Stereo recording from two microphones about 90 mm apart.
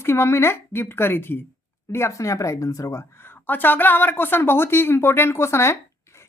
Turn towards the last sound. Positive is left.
turn(degrees=30)  # may be behind; listen again after turning